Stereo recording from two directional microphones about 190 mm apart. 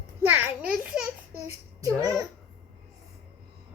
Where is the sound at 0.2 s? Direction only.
10° right (ahead or behind).